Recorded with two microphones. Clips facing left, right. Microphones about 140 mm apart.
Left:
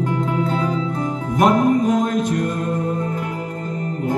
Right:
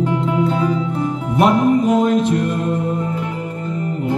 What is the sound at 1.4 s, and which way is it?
Music, 45° left (ahead or behind).